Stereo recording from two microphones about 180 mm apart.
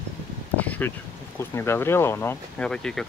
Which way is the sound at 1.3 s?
15° left (ahead or behind).